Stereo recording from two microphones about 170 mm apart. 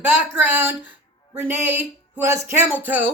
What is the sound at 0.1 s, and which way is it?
Speech, 10° right (ahead or behind).